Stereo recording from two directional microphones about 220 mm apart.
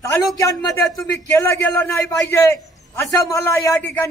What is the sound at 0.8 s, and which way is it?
A man's voice, 5° left (ahead or behind).